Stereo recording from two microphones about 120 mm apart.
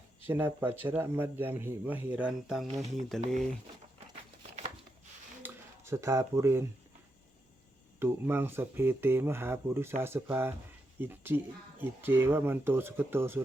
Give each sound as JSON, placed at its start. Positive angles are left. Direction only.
{"t": 0.3, "sound": "a man's voice", "side_deg": -20}
{"t": 5.4, "sound": "a sound", "side_deg": -25}
{"t": 7.9, "sound": "a man's voice", "side_deg": -20}